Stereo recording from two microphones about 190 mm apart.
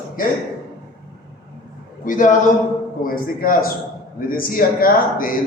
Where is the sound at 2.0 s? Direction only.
45° left (ahead or behind).